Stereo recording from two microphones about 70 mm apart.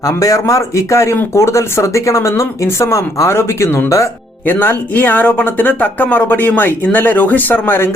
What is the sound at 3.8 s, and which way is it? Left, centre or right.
Speech, left.